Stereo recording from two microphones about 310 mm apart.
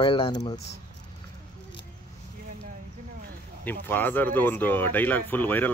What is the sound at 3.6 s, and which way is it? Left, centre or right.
Speech, centre.